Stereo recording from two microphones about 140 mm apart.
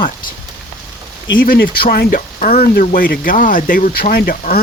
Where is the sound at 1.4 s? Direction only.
90° left.